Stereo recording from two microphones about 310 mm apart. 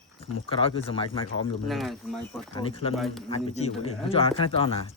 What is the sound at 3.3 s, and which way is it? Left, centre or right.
Speech, left.